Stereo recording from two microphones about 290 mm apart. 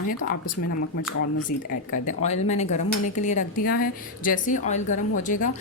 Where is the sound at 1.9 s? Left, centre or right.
Left.